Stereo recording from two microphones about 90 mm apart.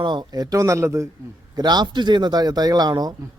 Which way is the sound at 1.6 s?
50° right (ahead or behind).